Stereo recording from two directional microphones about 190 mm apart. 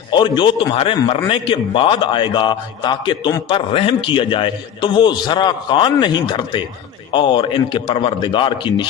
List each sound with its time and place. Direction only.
0.1 s a man's voice: 25° left (ahead or behind)